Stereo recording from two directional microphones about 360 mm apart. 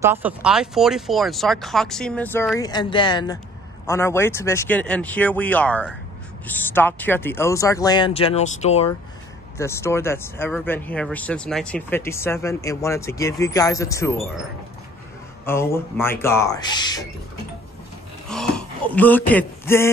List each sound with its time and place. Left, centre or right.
0.0 s speech: centre
15.4 s speech: centre
18.3 s speech: centre